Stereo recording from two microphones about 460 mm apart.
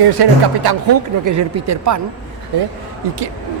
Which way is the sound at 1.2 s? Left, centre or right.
Right.